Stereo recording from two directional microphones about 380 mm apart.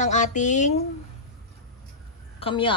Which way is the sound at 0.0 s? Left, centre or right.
Centre.